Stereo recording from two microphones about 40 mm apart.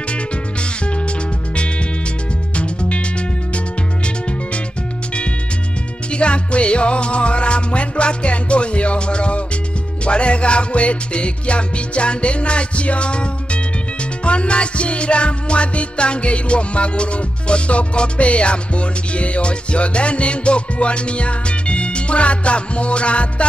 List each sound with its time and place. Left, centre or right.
2.5 s music: left
6.1 s music: left